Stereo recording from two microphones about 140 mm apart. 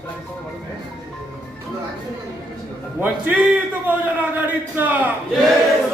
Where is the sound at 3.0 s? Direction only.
10° right (ahead or behind).